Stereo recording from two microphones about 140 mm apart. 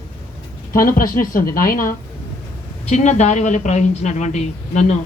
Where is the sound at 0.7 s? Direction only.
85° left.